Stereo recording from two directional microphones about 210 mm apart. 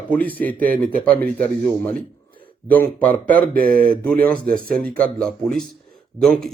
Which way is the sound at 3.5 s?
45° right (ahead or behind).